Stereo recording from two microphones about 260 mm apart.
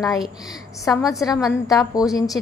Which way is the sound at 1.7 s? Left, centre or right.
Centre.